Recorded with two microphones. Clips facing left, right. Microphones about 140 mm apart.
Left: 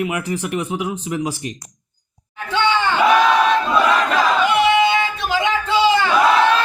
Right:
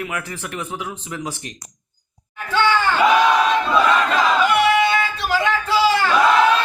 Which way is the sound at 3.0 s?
Centre (ahead or behind).